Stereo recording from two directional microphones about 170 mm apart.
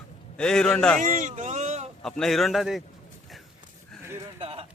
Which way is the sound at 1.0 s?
45° right (ahead or behind).